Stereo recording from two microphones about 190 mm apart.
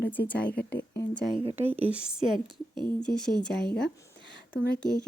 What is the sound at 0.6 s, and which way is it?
Speech, 55° left (ahead or behind).